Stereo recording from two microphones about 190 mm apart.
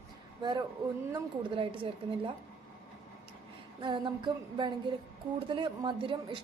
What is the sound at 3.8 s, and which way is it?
A woman's voice, 25° right (ahead or behind).